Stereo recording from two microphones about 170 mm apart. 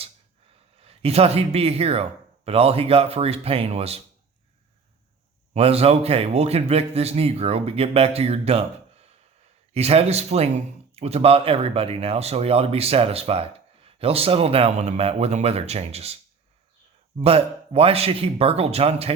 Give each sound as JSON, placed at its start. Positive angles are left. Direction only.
{"t": 0.8, "sound": "a man's voice", "side_deg": -35}
{"t": 5.5, "sound": "a man's voice", "side_deg": -35}
{"t": 17.2, "sound": "a man's voice", "side_deg": -35}